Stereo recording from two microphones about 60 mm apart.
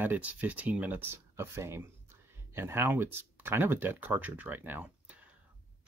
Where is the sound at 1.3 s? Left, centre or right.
Right.